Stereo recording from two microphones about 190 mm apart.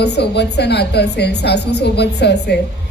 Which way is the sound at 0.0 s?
60° left (ahead or behind).